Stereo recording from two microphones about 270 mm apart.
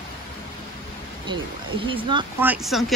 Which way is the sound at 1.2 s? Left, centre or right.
Centre.